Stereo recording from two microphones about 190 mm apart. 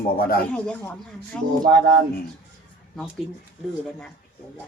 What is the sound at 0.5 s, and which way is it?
Speech, 5° left (ahead or behind).